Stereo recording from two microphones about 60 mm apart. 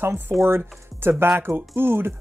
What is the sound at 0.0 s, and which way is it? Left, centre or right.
Speech, right.